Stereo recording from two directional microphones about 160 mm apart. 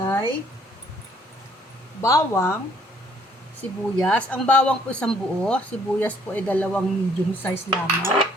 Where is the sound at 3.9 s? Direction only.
5° left (ahead or behind).